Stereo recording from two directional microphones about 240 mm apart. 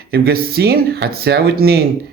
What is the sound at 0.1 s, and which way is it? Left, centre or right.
Speech, right.